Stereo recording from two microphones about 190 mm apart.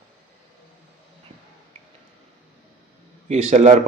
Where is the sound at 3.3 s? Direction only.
35° right (ahead or behind).